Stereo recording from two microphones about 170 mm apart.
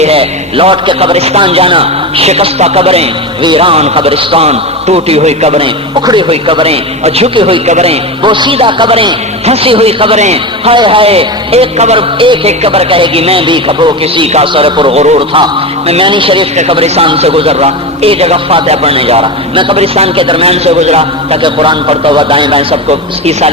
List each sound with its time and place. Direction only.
0.0 s a man's voice: 35° right (ahead or behind)